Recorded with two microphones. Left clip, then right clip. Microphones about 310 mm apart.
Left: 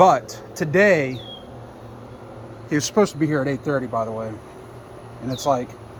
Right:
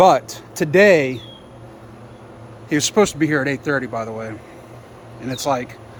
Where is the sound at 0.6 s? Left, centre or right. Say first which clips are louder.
Right 4 dB; centre.